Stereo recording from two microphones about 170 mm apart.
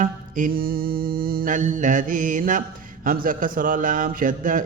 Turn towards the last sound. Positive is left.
turn(degrees=-50)  # may be behind; listen again after turning